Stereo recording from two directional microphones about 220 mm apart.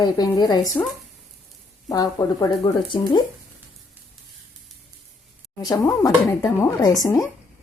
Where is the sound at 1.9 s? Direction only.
15° left (ahead or behind).